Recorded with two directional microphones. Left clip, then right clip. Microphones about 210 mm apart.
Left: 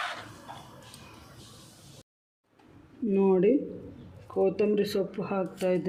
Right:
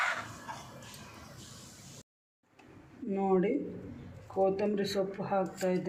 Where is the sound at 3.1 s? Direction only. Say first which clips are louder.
Left 6 dB; 60° left (ahead or behind).